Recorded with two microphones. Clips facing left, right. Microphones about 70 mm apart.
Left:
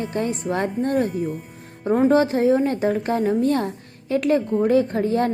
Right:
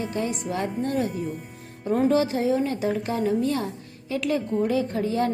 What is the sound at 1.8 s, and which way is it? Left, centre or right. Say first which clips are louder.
A woman's voice: left 4 dB; left.